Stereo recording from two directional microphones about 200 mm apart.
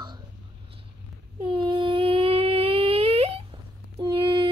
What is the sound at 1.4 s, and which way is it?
Humming, 25° right (ahead or behind).